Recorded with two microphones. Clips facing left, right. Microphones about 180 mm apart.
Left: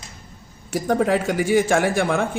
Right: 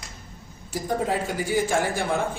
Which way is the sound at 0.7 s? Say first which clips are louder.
Left 6 dB; 75° left (ahead or behind).